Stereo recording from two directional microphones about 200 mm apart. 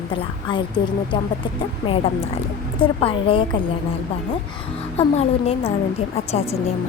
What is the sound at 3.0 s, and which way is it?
Speech, 25° left (ahead or behind).